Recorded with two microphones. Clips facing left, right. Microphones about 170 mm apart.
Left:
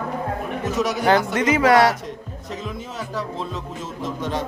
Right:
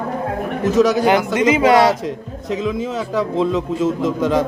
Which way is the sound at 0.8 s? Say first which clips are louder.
Right 10 dB; 90° right.